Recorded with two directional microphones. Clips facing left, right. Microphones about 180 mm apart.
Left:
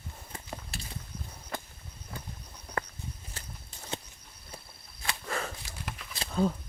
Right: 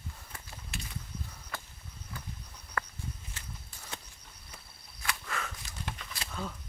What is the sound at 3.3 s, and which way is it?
Walk, 40° left (ahead or behind).